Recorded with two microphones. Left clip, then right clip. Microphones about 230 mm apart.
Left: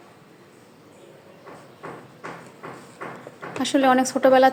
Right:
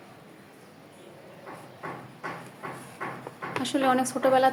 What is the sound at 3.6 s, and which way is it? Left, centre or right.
Speech, left.